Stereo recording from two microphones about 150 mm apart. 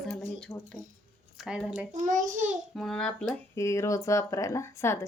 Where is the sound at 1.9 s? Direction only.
60° right (ahead or behind).